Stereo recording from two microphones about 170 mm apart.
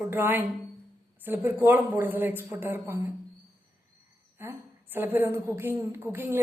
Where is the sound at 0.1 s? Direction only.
10° right (ahead or behind).